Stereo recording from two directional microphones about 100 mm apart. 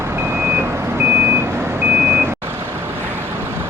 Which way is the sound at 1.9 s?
15° right (ahead or behind).